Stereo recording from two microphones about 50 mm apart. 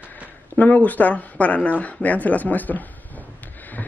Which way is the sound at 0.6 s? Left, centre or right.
Left.